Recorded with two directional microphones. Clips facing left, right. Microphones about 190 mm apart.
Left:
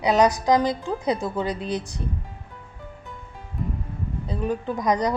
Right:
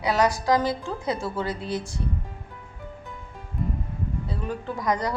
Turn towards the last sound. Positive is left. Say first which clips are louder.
# left 4 dB
turn(degrees=20)  # may be behind; listen again after turning